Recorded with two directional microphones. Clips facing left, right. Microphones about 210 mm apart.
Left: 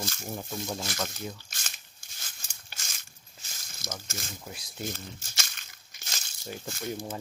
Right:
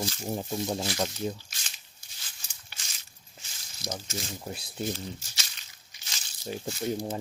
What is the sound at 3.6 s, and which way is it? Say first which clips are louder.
Snake: right 4 dB; 50° left (ahead or behind).